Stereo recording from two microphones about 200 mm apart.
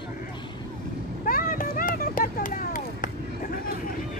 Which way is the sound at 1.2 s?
45° left (ahead or behind).